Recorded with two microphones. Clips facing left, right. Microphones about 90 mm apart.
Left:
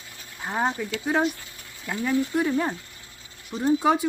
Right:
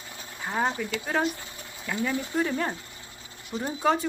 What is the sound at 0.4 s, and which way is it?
Speech, 15° left (ahead or behind).